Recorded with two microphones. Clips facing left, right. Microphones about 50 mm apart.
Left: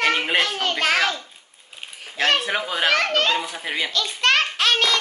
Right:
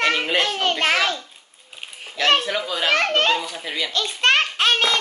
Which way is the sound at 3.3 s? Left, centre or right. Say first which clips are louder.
Right 1 dB; left.